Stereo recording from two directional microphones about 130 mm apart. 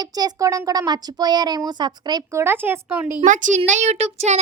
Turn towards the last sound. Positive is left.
turn(degrees=-60)  # may be behind; listen again after turning